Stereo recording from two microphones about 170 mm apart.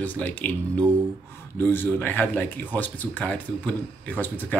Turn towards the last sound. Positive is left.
turn(degrees=10)  # may be behind; listen again after turning